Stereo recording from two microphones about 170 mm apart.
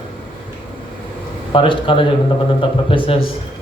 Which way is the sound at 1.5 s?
30° left (ahead or behind).